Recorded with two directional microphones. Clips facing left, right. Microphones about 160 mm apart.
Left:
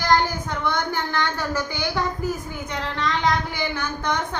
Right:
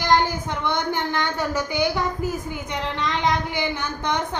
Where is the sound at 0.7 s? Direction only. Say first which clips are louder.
Right 1 dB; 20° right (ahead or behind).